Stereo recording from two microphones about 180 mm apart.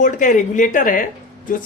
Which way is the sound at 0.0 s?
45° left (ahead or behind).